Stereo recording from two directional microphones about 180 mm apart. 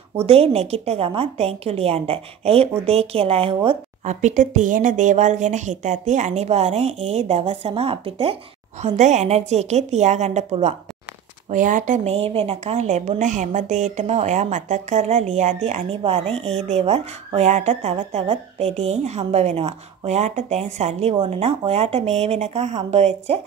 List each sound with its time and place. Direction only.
0.3 s a woman's voice: 35° right (ahead or behind)